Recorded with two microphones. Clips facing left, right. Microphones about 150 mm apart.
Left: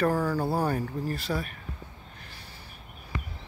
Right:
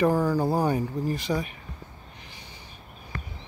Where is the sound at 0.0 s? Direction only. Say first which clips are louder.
Right 3 dB; 15° right (ahead or behind).